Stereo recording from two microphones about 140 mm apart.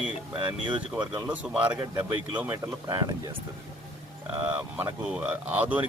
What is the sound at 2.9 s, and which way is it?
Speech, 25° right (ahead or behind).